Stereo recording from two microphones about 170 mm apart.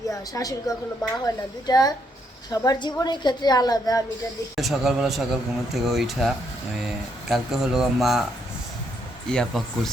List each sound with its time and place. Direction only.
0.4 s a woman's voice: 15° left (ahead or behind)
4.5 s a man's voice: centre (ahead or behind)
9.3 s a man's voice: centre (ahead or behind)